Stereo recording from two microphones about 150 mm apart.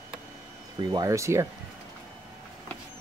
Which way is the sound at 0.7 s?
25° right (ahead or behind).